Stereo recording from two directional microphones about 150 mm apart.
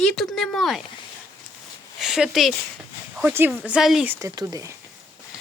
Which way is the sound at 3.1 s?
15° right (ahead or behind).